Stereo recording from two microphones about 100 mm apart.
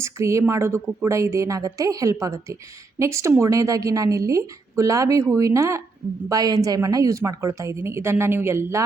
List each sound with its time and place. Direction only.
0.0 s a woman's voice: 30° right (ahead or behind)